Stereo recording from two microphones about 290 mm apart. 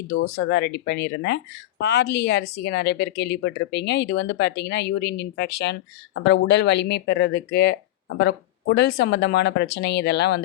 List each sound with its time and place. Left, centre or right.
0.1 s speech: left